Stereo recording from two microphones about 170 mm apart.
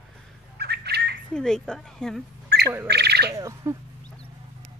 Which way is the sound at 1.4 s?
5° left (ahead or behind).